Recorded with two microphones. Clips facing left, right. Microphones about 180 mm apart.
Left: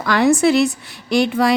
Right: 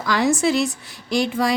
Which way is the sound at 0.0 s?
60° left (ahead or behind).